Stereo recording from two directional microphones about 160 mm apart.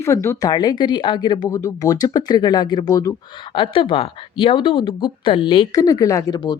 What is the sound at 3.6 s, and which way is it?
Speech, 30° left (ahead or behind).